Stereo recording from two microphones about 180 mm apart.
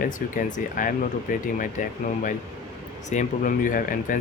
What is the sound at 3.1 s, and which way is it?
Speech, 45° left (ahead or behind).